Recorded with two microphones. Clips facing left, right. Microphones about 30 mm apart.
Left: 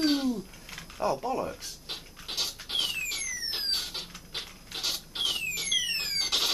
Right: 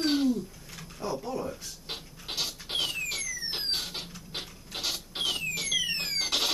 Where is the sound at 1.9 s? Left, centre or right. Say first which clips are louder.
Right 1 dB; centre.